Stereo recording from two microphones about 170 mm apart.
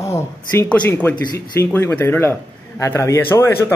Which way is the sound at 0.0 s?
15° left (ahead or behind).